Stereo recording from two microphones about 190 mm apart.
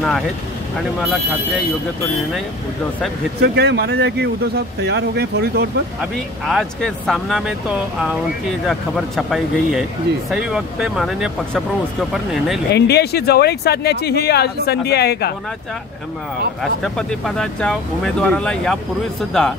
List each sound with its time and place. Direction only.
3.3 s speech: 60° right (ahead or behind)
6.4 s speech: centre (ahead or behind)
8.6 s speech: centre (ahead or behind)
12.7 s speech: 60° left (ahead or behind)
16.8 s speech: centre (ahead or behind)